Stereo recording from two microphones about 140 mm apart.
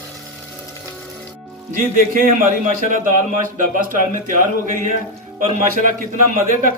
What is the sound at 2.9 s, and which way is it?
Speech, 65° right (ahead or behind).